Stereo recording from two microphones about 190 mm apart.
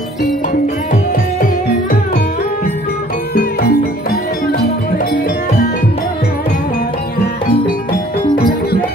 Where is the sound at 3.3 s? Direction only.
55° left (ahead or behind).